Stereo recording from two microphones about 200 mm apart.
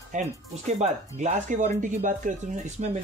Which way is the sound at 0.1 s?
35° right (ahead or behind).